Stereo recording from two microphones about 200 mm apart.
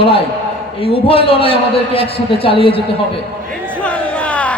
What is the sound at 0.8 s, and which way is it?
A man's voice, 25° left (ahead or behind).